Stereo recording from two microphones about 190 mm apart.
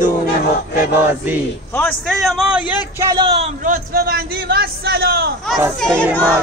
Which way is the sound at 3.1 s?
25° right (ahead or behind).